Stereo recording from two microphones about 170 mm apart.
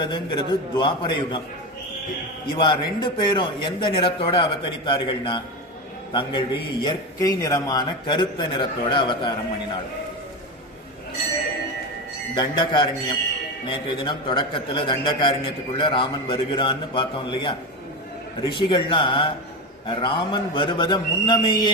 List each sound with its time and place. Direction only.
0.0 s a man's voice: 25° left (ahead or behind)
2.6 s a man's voice: 25° left (ahead or behind)
6.8 s a man's voice: 20° left (ahead or behind)
12.3 s a man's voice: 25° left (ahead or behind)